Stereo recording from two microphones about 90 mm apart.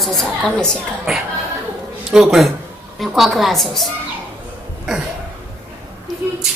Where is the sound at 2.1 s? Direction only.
5° right (ahead or behind).